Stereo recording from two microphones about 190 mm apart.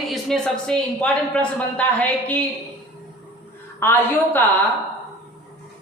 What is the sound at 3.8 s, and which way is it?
Speech, 10° left (ahead or behind).